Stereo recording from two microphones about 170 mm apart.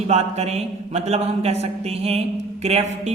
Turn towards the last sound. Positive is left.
turn(degrees=-40)  # may be behind; listen again after turning